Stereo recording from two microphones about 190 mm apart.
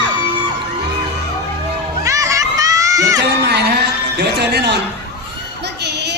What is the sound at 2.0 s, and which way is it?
Crowd, 15° right (ahead or behind).